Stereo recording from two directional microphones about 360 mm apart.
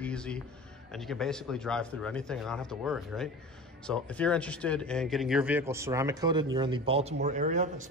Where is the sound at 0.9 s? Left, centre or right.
Centre.